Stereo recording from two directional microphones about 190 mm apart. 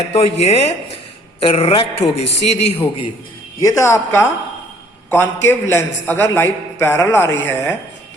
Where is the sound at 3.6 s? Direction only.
15° left (ahead or behind).